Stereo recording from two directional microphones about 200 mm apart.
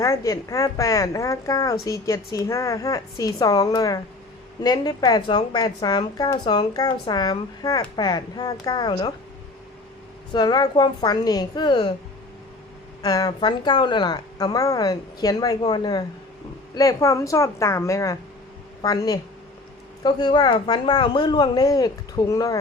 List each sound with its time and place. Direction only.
0.0 s a woman's voice: 15° left (ahead or behind)
10.3 s a woman's voice: 20° left (ahead or behind)
13.0 s a woman's voice: 20° left (ahead or behind)